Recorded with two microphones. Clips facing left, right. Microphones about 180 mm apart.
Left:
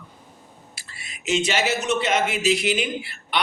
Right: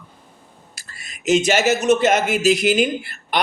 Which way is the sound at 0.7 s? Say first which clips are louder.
Even; 45° right (ahead or behind).